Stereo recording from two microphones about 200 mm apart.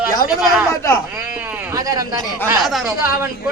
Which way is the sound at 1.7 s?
20° right (ahead or behind).